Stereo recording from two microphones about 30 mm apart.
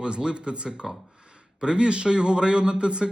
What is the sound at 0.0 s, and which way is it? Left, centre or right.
A man's voice, right.